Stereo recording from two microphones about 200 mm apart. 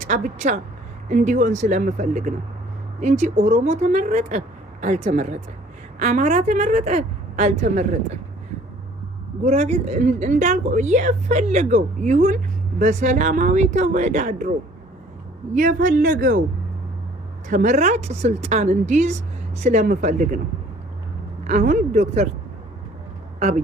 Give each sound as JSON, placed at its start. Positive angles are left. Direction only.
{"t": 0.0, "sound": "a woman's voice", "side_deg": -40}
{"t": 9.4, "sound": "a woman's voice", "side_deg": -35}
{"t": 15.5, "sound": "speech", "side_deg": -40}
{"t": 17.5, "sound": "a woman's voice", "side_deg": -40}
{"t": 21.4, "sound": "a woman's voice", "side_deg": -40}
{"t": 23.4, "sound": "speech", "side_deg": -35}